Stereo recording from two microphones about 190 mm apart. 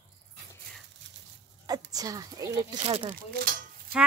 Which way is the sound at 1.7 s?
20° right (ahead or behind).